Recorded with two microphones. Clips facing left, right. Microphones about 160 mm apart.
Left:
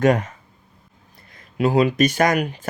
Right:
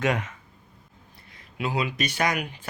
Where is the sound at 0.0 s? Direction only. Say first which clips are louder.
Left 8 dB; 40° left (ahead or behind).